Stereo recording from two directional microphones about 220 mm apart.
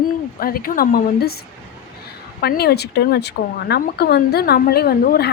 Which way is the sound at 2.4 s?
45° left (ahead or behind).